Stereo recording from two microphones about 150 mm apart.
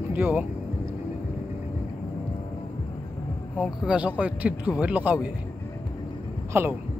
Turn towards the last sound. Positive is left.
turn(degrees=-15)  # may be behind; listen again after turning